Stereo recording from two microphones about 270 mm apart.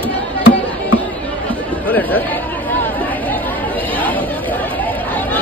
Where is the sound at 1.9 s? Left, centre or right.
Centre.